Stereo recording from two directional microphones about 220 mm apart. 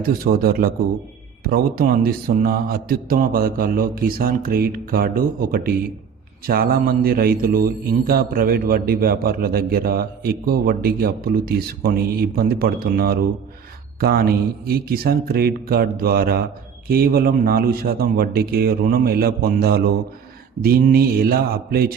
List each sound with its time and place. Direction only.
0.0 s a man's voice: 40° right (ahead or behind)
6.5 s mantra: 40° right (ahead or behind)